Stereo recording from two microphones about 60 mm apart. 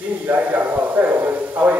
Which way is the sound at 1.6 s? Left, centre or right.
Right.